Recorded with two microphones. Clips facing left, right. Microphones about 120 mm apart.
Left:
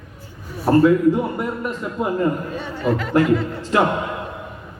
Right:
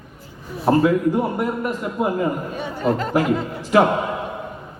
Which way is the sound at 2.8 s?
35° right (ahead or behind).